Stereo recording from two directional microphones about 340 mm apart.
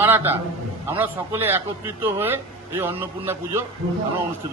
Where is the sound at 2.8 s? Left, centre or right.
Centre.